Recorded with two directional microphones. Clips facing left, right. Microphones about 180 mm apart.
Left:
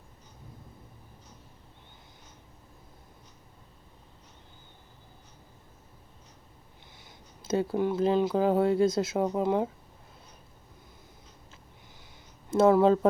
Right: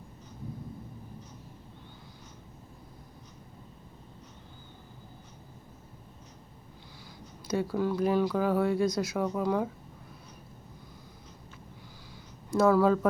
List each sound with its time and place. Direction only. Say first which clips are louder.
7.4 s speech: left 2 dB; 25° left (ahead or behind)
12.5 s speech: left 2 dB; 25° left (ahead or behind)